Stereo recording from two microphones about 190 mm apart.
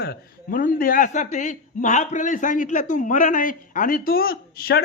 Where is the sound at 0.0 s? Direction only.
50° left (ahead or behind).